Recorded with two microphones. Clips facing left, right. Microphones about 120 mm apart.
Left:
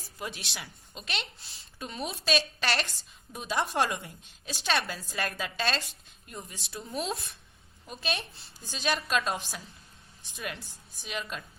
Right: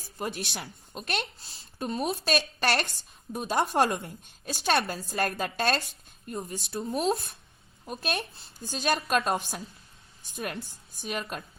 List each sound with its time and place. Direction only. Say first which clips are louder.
0.2 s a woman's voice: right 5 dB; 50° right (ahead or behind)